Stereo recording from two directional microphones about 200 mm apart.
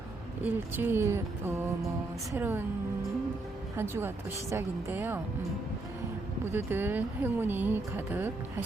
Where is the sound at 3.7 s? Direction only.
10° right (ahead or behind).